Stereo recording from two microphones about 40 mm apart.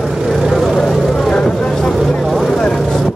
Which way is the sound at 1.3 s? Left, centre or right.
Centre.